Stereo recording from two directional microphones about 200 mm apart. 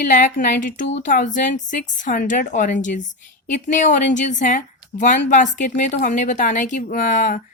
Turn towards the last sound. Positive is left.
turn(degrees=40)  # may be behind; listen again after turning